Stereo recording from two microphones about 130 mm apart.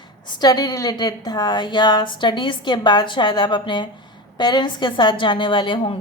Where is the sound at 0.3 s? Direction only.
30° left (ahead or behind).